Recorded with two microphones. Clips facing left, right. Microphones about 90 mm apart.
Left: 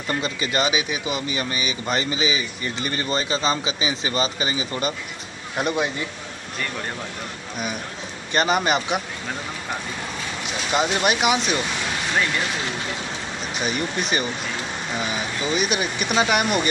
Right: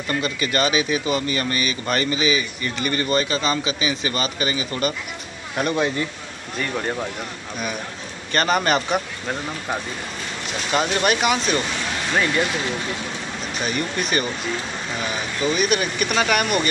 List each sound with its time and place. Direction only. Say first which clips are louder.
0.1 s speech: right 1 dB; 20° left (ahead or behind)
8.3 s speech: right 1 dB; 15° left (ahead or behind)
10.7 s speech: right 1 dB; 15° left (ahead or behind)
13.7 s speech: even; 20° left (ahead or behind)
15.4 s speech: right 3 dB; 20° left (ahead or behind)